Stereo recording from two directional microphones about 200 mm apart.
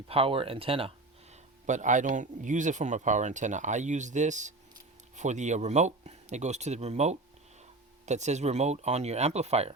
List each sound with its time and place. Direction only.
0.1 s speech: 30° right (ahead or behind)